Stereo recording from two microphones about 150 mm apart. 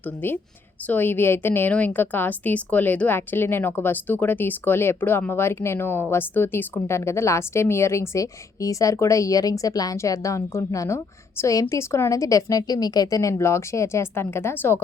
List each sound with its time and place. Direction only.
0.9 s a woman's voice: 15° left (ahead or behind)